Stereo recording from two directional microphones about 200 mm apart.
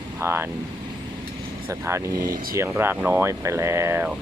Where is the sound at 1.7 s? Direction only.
15° right (ahead or behind).